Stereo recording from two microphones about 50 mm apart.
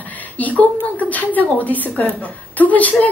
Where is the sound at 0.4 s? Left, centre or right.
Left.